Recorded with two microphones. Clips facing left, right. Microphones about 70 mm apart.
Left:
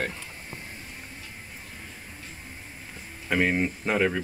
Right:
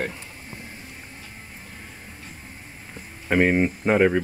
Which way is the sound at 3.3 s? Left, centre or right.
Centre.